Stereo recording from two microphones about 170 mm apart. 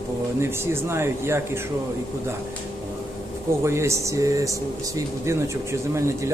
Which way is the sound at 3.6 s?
15° right (ahead or behind).